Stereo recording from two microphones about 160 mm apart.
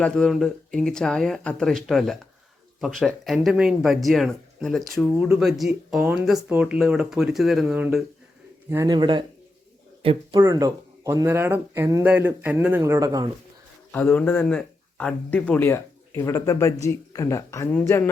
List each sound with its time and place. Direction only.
0.0 s speech: 5° left (ahead or behind)
8.7 s speech: 20° right (ahead or behind)
10.4 s a man's voice: 25° right (ahead or behind)
13.9 s speech: 10° left (ahead or behind)